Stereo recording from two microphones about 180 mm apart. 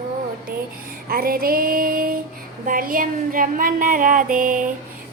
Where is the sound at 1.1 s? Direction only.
55° right (ahead or behind).